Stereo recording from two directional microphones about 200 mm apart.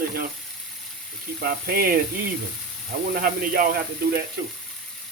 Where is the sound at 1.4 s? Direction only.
45° right (ahead or behind).